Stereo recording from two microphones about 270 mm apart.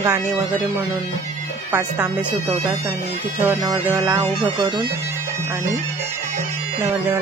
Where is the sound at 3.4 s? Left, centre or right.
Centre.